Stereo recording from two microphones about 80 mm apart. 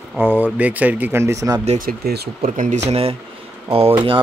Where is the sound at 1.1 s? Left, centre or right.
Right.